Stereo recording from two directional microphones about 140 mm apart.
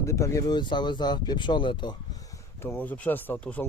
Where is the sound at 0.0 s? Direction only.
20° left (ahead or behind).